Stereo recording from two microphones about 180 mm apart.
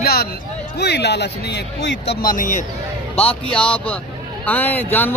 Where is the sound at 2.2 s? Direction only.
45° left (ahead or behind).